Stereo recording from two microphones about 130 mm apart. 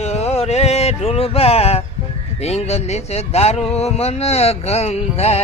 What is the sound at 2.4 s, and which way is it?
Speech, 55° left (ahead or behind).